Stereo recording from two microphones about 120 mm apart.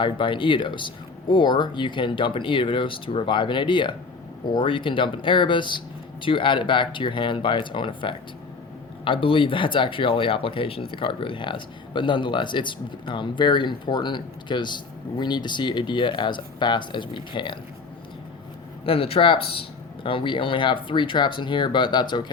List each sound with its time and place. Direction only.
0.0 s speech: 45° left (ahead or behind)
18.9 s speech: 50° left (ahead or behind)